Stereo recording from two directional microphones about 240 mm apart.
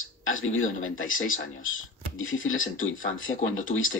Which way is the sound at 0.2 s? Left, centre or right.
Left.